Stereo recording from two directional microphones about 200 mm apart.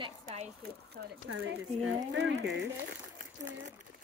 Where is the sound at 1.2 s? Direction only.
85° right.